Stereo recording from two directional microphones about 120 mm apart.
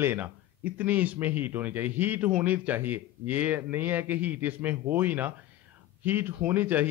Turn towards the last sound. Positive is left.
turn(degrees=-15)  # may be behind; listen again after turning